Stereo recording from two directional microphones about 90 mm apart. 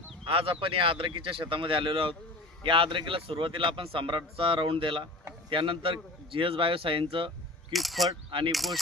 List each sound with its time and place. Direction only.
0.3 s a man's voice: 85° right
7.7 s speech: centre (ahead or behind)
8.3 s speech: 70° right (ahead or behind)
8.5 s speech: centre (ahead or behind)